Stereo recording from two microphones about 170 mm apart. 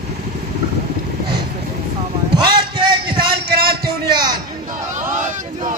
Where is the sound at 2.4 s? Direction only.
30° right (ahead or behind).